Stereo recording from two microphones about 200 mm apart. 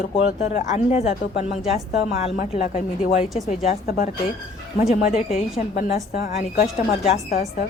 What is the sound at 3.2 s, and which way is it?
Speech, centre (ahead or behind).